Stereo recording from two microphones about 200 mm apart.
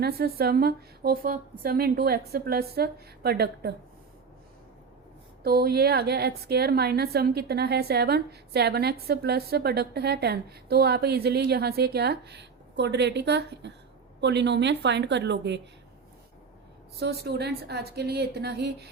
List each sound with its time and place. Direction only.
0.0 s a woman's voice: 50° right (ahead or behind)
5.4 s a woman's voice: 50° right (ahead or behind)
17.0 s a woman's voice: 55° right (ahead or behind)